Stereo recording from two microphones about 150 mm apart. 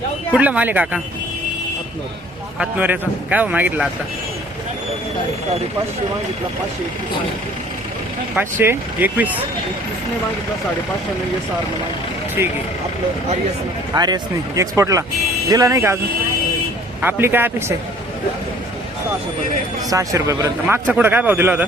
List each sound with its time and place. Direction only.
0.3 s a man's voice: 10° right (ahead or behind)
2.6 s a man's voice: 10° right (ahead or behind)
8.4 s a man's voice: 15° right (ahead or behind)
12.4 s a man's voice: 15° right (ahead or behind)
13.9 s speech: 25° right (ahead or behind)
17.0 s a man's voice: 15° right (ahead or behind)
19.9 s a man's voice: 20° right (ahead or behind)